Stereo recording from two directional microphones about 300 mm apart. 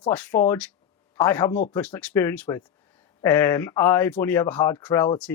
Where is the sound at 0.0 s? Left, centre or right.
Centre.